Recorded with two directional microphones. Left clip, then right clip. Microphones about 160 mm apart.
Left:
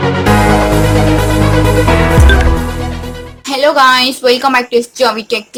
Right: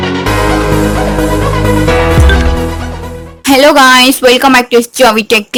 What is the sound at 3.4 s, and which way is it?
A woman's voice, 40° right (ahead or behind).